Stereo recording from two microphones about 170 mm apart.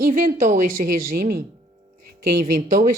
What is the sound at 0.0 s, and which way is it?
Speech, 50° right (ahead or behind).